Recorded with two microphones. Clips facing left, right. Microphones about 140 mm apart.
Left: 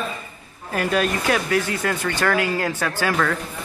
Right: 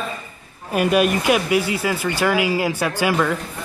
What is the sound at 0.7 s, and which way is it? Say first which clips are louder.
Speech: right 4 dB; 15° right (ahead or behind).